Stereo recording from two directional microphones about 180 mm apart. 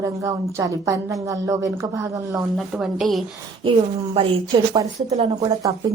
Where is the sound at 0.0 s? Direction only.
20° right (ahead or behind).